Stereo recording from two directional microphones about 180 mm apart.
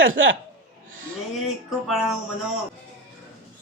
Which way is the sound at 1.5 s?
Centre (ahead or behind).